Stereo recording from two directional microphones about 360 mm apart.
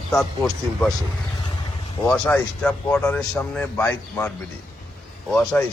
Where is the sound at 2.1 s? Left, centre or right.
Centre.